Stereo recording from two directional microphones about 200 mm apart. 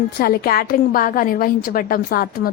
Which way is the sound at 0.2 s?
50° left (ahead or behind).